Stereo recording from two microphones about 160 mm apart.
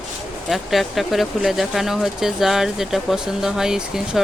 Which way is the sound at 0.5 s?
Centre (ahead or behind).